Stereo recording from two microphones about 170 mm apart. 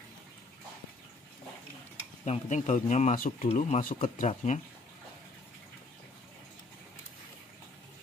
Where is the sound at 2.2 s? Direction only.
45° left (ahead or behind).